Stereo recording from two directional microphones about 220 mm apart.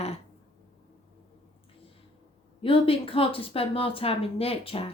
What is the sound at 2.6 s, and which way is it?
Speech, 25° left (ahead or behind).